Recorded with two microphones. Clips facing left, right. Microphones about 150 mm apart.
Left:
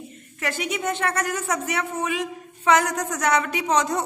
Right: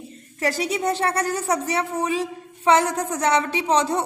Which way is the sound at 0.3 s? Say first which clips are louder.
Right 4 dB; 35° right (ahead or behind).